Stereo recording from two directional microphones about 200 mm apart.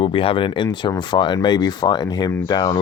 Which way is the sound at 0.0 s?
25° left (ahead or behind).